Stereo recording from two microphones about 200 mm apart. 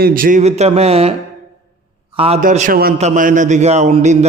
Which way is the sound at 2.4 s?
40° right (ahead or behind).